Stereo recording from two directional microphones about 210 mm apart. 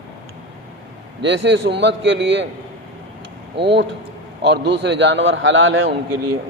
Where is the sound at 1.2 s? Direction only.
60° right (ahead or behind).